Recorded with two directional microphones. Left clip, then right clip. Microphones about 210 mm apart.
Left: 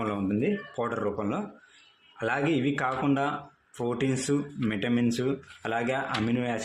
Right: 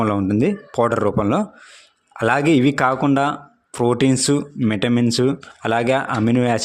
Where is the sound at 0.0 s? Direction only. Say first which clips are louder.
Right 10 dB; 50° right (ahead or behind).